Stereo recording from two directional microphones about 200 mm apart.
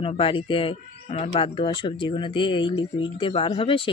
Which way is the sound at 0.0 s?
25° left (ahead or behind).